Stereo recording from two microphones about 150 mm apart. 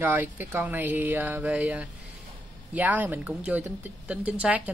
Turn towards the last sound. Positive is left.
turn(degrees=-10)  # may be behind; listen again after turning